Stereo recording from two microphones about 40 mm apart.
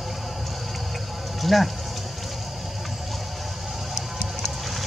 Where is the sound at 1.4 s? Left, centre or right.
Centre.